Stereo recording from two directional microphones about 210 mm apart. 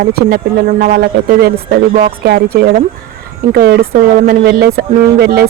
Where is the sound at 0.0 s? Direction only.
45° right (ahead or behind).